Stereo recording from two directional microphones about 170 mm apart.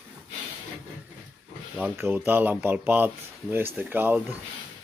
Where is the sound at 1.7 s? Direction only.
10° right (ahead or behind).